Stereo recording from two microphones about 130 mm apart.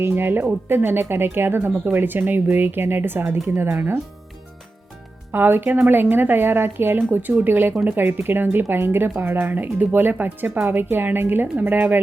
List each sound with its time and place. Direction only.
0.0 s speech: 15° right (ahead or behind)
5.3 s speech: 15° right (ahead or behind)